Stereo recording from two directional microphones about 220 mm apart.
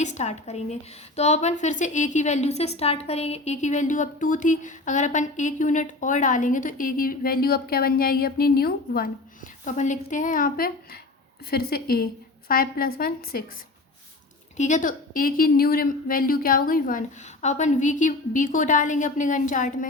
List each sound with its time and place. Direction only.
0.0 s a woman's voice: 30° left (ahead or behind)
14.5 s a woman's voice: 35° left (ahead or behind)